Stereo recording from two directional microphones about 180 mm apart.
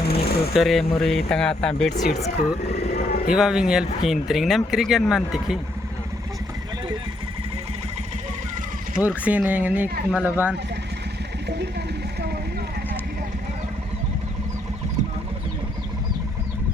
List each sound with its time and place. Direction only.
0.1 s a sound: 60° left (ahead or behind)
0.5 s speech: centre (ahead or behind)
2.4 s speech: 55° left (ahead or behind)
3.2 s speech: 5° right (ahead or behind)
9.0 s speech: 10° right (ahead or behind)